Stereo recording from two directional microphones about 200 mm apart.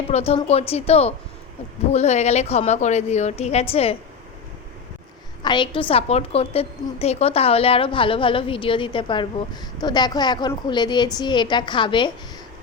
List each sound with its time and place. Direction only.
0.1 s speech: 30° left (ahead or behind)
5.4 s a woman's voice: 25° left (ahead or behind)